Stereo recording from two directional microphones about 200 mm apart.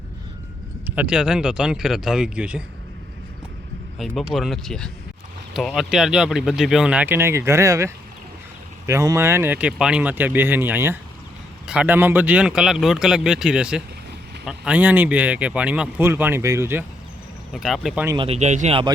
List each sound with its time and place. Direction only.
0.9 s speech: 5° right (ahead or behind)
3.9 s speech: centre (ahead or behind)
17.5 s speech: centre (ahead or behind)
18.0 s speech: 15° right (ahead or behind)
18.3 s speech: 35° right (ahead or behind)